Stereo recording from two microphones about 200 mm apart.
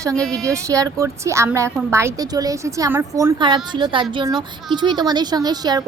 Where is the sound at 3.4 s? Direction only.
20° right (ahead or behind).